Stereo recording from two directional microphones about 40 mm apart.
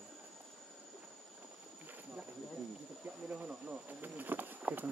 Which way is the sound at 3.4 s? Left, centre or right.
Right.